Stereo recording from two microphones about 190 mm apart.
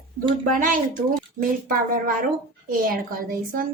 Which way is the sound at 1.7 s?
45° right (ahead or behind).